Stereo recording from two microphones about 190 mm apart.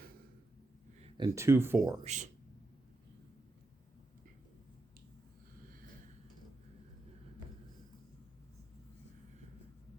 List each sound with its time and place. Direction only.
0.9 s speech: 30° right (ahead or behind)
2.0 s speech: 40° right (ahead or behind)